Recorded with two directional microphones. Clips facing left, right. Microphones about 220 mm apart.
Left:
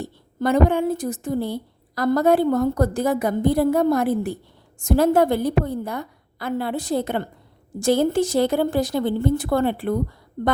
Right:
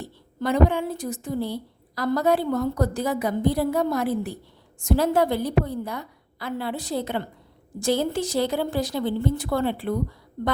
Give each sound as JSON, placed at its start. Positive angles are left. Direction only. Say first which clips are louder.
{"t": 0.0, "sound": "a woman's voice", "louder": "left 5 dB", "side_deg": 50}